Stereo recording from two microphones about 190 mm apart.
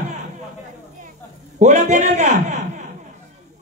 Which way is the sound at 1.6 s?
40° right (ahead or behind).